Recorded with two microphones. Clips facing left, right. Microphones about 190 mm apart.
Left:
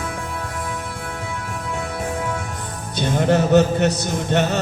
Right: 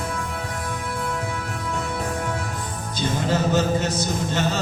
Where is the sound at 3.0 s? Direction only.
65° left (ahead or behind).